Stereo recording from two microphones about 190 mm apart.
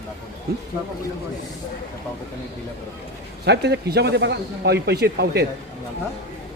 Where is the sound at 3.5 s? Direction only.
60° right (ahead or behind).